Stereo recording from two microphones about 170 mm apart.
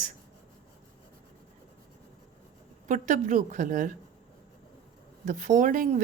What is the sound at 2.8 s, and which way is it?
A woman's voice, 50° right (ahead or behind).